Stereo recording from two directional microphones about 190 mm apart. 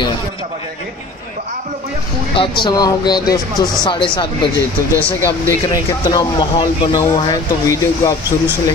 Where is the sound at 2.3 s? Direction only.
25° left (ahead or behind).